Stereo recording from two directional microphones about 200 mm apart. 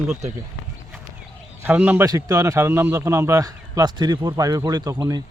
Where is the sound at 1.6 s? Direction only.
10° right (ahead or behind).